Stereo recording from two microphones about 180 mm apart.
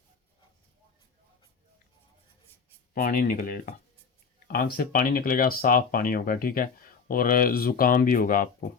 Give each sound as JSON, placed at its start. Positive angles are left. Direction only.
{"t": 2.9, "sound": "speech", "side_deg": 55}